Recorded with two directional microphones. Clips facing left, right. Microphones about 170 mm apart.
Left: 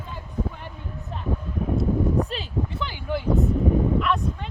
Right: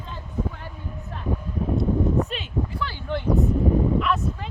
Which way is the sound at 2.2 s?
35° left (ahead or behind).